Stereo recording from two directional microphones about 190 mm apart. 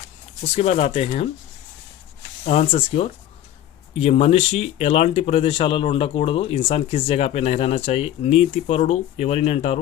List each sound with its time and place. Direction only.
0.5 s speech: 35° left (ahead or behind)
2.4 s speech: 35° left (ahead or behind)